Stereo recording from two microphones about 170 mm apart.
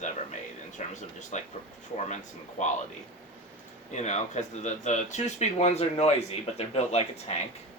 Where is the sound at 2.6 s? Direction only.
45° left (ahead or behind).